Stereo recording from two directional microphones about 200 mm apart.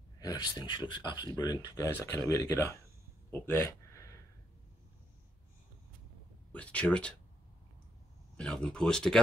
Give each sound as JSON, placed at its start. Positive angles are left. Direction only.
{"t": 0.2, "sound": "speech", "side_deg": 20}
{"t": 3.3, "sound": "a sound", "side_deg": 10}
{"t": 6.5, "sound": "speech", "side_deg": 5}
{"t": 8.4, "sound": "speech", "side_deg": 5}